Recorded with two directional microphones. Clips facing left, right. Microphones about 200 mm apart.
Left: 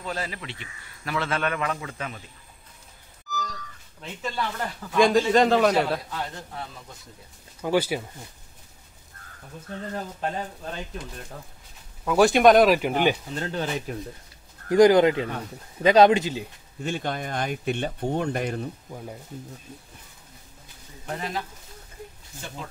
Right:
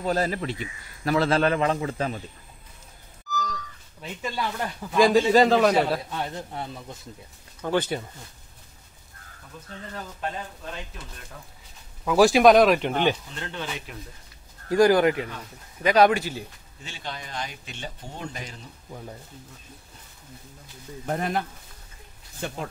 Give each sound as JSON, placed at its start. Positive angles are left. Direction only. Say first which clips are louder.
{"t": 0.0, "sound": "speech", "louder": "right 8 dB", "side_deg": -40}
{"t": 3.3, "sound": "a sound", "louder": "right 2 dB", "side_deg": 5}
{"t": 4.0, "sound": "speech", "louder": "even", "side_deg": -10}
{"t": 6.0, "sound": "a man's voice", "louder": "right 2 dB", "side_deg": -25}
{"t": 7.6, "sound": "speech", "louder": "left 2 dB", "side_deg": 10}
{"t": 9.9, "sound": "speech", "louder": "left 2 dB", "side_deg": 30}
{"t": 12.0, "sound": "speech", "louder": "right 1 dB", "side_deg": 0}
{"t": 13.4, "sound": "speech", "louder": "left 5 dB", "side_deg": 40}
{"t": 14.7, "sound": "speech", "louder": "left 2 dB", "side_deg": 20}
{"t": 16.8, "sound": "speech", "louder": "left 9 dB", "side_deg": 55}
{"t": 18.9, "sound": "speech", "louder": "left 2 dB", "side_deg": 10}
{"t": 21.1, "sound": "speech", "louder": "right 4 dB", "side_deg": -55}